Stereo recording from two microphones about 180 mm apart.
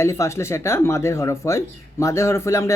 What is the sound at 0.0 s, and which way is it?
Speech, 15° left (ahead or behind).